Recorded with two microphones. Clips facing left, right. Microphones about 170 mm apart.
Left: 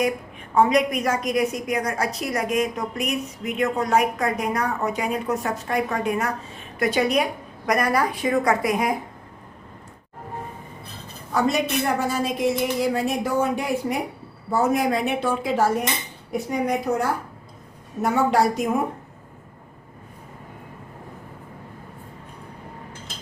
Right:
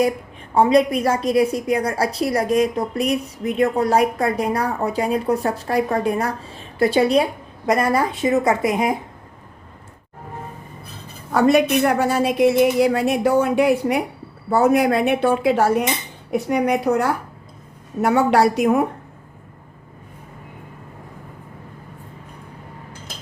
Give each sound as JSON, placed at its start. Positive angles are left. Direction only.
{"t": 0.5, "sound": "a woman's voice", "side_deg": -30}
{"t": 11.3, "sound": "a woman's voice", "side_deg": -65}